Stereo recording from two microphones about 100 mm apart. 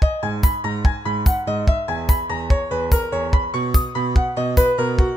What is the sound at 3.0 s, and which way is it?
Music, 25° left (ahead or behind).